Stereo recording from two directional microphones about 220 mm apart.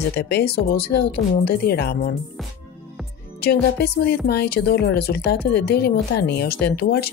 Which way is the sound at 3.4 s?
45° left (ahead or behind).